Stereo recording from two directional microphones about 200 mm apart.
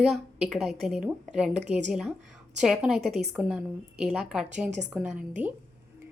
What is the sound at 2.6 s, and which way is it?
A woman's voice, centre (ahead or behind).